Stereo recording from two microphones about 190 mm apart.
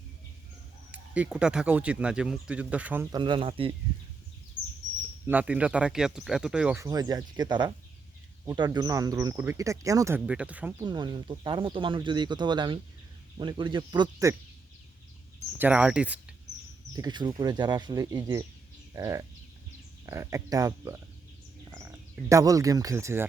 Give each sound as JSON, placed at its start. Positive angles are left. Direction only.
{"t": 0.9, "sound": "speech", "side_deg": -5}
{"t": 3.2, "sound": "speech", "side_deg": -25}
{"t": 5.2, "sound": "speech", "side_deg": -10}
{"t": 6.7, "sound": "speech", "side_deg": -20}
{"t": 10.8, "sound": "speech", "side_deg": -20}
{"t": 15.5, "sound": "speech", "side_deg": -10}
{"t": 16.9, "sound": "speech", "side_deg": -20}
{"t": 22.3, "sound": "speech", "side_deg": -15}